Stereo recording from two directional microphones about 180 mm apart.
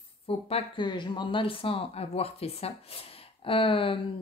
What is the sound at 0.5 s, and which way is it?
Speech, 30° left (ahead or behind).